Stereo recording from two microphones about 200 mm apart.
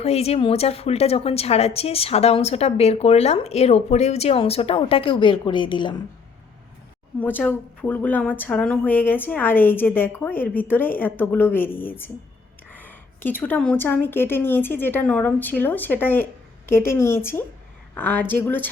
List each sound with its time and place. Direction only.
0.0 s a woman's voice: 30° left (ahead or behind)
7.2 s speech: 10° left (ahead or behind)